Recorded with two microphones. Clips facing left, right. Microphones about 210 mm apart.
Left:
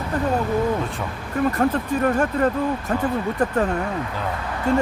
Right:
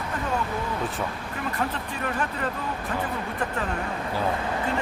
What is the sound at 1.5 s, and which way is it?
Speech, 45° left (ahead or behind).